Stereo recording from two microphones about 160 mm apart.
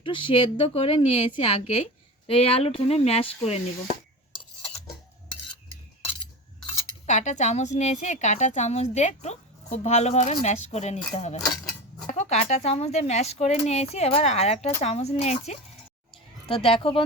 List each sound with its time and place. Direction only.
0.0 s a woman's voice: 30° left (ahead or behind)
7.1 s a woman's voice: 50° left (ahead or behind)